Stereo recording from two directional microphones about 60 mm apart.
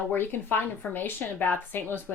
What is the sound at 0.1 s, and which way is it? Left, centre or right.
Speech, left.